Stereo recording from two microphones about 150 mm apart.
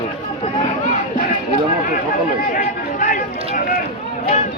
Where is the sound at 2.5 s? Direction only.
65° left (ahead or behind).